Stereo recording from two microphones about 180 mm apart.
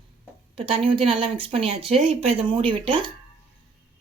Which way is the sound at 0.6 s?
30° right (ahead or behind).